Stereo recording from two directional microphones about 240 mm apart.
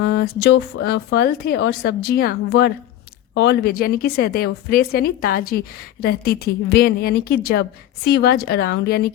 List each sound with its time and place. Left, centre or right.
0.0 s a woman's voice: left